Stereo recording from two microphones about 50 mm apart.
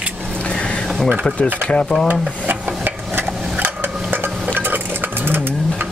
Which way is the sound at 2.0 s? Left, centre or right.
Right.